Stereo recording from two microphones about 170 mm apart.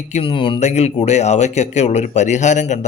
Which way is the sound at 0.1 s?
35° left (ahead or behind).